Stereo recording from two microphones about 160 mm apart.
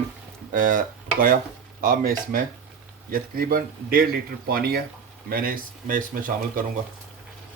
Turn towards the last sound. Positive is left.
turn(degrees=-60)  # may be behind; listen again after turning